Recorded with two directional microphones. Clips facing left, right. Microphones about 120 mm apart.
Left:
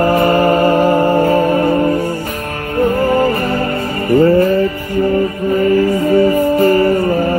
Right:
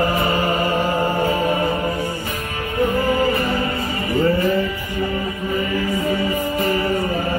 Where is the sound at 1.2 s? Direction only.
45° left (ahead or behind).